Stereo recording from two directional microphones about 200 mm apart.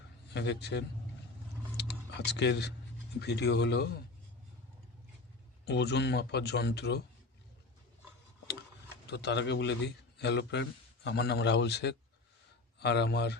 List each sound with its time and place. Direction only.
0.3 s a man's voice: 60° left (ahead or behind)
1.7 s typing: 60° left (ahead or behind)
3.2 s a man's voice: 55° left (ahead or behind)
5.6 s a man's voice: 55° left (ahead or behind)
9.0 s a man's voice: 55° left (ahead or behind)